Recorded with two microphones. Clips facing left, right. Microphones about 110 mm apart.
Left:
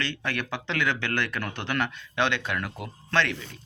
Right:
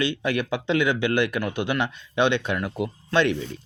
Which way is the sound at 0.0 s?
15° right (ahead or behind).